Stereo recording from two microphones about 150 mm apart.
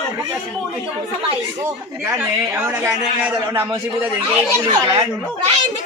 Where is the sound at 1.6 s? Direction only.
15° right (ahead or behind).